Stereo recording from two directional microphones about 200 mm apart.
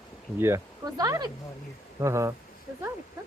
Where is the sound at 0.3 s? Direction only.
15° right (ahead or behind).